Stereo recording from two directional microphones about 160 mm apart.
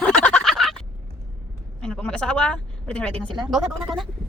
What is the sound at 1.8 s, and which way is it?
Speech, 5° left (ahead or behind).